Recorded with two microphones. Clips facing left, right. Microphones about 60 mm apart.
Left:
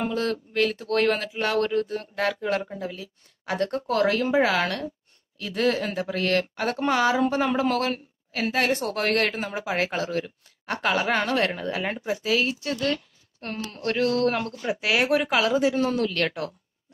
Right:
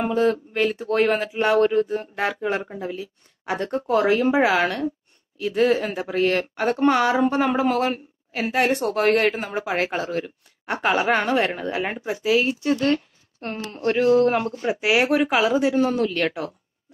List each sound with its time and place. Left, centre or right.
0.0 s speech: centre
12.7 s speech: right; by 16.5 s centre